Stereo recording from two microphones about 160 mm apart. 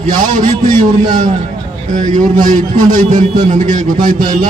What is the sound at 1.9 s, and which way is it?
A man's voice, 50° right (ahead or behind).